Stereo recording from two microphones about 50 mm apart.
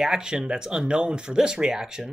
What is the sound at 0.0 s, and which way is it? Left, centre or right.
Speech, centre.